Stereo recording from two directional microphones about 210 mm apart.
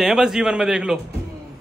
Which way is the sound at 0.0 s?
Centre (ahead or behind).